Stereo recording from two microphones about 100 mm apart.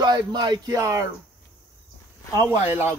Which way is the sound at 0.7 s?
30° right (ahead or behind).